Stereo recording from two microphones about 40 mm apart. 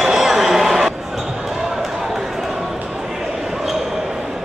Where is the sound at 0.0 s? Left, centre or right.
Centre.